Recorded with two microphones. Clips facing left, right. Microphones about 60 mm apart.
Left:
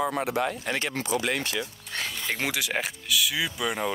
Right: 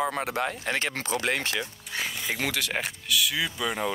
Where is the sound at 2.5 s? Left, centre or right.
Centre.